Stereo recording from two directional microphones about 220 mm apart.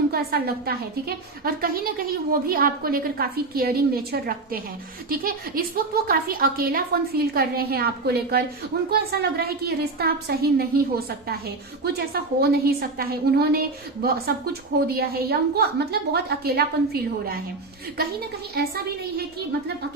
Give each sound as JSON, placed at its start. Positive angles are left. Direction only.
{"t": 0.1, "sound": "a woman's voice", "side_deg": -45}
{"t": 18.5, "sound": "a woman's voice", "side_deg": -45}